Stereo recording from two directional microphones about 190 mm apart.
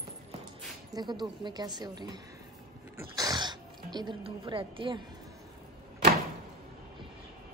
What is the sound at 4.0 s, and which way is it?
A woman's voice, 25° right (ahead or behind).